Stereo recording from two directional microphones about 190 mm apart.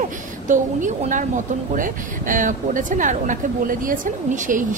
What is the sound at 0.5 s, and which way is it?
Speech, 40° right (ahead or behind).